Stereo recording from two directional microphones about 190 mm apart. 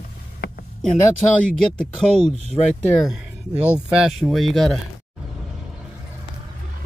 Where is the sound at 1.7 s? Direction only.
5° left (ahead or behind).